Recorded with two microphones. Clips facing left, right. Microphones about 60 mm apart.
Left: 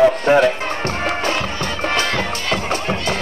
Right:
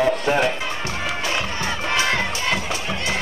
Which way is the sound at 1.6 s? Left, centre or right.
Left.